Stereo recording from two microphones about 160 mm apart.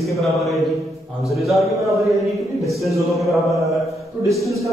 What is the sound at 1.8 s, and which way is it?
Mantra, 20° right (ahead or behind).